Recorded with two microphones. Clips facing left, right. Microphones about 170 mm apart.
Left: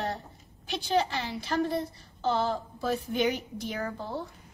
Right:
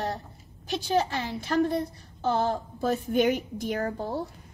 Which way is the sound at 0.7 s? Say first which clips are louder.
Right 2 dB; 50° right (ahead or behind).